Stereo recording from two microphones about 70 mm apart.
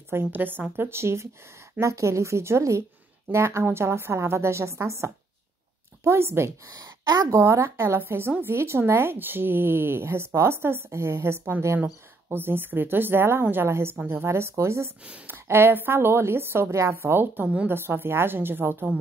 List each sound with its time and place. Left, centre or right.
0.2 s speech: right
6.8 s speech: right
15.2 s speech: right